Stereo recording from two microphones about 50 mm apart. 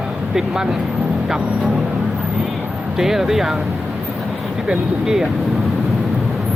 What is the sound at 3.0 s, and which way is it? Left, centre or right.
Speech, centre.